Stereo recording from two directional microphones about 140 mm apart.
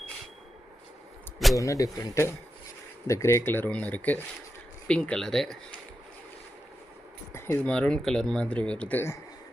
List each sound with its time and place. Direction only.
1.5 s speech: 25° left (ahead or behind); by 5.5 s 5° left (ahead or behind)
7.3 s speech: 20° left (ahead or behind)